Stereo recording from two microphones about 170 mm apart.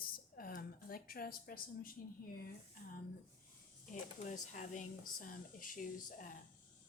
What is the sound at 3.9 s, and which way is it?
Speech, 45° left (ahead or behind).